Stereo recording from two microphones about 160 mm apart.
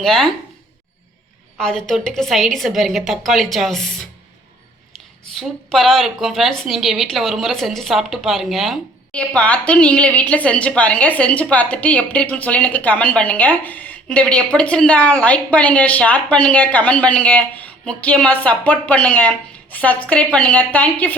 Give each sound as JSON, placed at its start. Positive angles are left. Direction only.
{"t": 0.0, "sound": "a woman's voice", "side_deg": 0}
{"t": 1.5, "sound": "a woman's voice", "side_deg": 5}
{"t": 5.4, "sound": "a woman's voice", "side_deg": 0}